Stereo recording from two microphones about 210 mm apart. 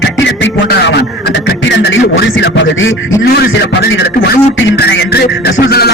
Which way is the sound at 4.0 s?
50° left (ahead or behind).